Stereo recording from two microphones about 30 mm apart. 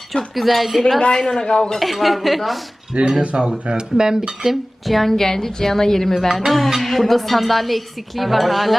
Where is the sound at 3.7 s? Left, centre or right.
Right.